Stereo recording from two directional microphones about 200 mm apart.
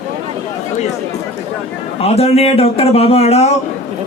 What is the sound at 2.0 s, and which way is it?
Speech, 30° left (ahead or behind).